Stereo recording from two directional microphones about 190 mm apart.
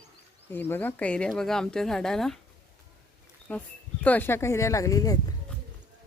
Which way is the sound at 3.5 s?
5° left (ahead or behind).